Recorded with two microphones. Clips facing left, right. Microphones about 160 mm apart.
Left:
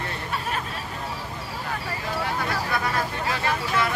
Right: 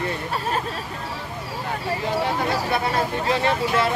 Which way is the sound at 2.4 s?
25° right (ahead or behind).